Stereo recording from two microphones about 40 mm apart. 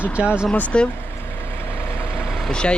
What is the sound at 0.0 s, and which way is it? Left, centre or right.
Speech, right.